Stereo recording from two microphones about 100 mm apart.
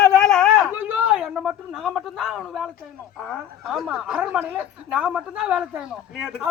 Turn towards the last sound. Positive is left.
turn(degrees=-5)  # may be behind; listen again after turning